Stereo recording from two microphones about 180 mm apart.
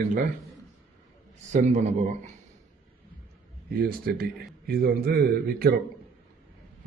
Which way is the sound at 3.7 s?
60° right (ahead or behind).